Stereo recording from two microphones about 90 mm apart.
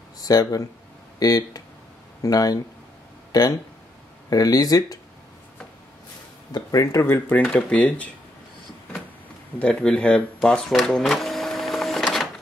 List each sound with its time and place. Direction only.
0.2 s speech: 45° left (ahead or behind)
3.3 s a sound: 45° left (ahead or behind)
4.3 s speech: 40° left (ahead or behind)
6.5 s speech: 40° left (ahead or behind)
7.2 s speech: 15° left (ahead or behind)
9.6 s speech: 15° left (ahead or behind)